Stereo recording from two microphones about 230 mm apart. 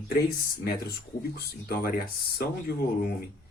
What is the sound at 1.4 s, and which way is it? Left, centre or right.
Speech, left.